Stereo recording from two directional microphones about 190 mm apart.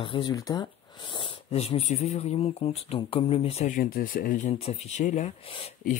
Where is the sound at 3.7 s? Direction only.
50° left (ahead or behind).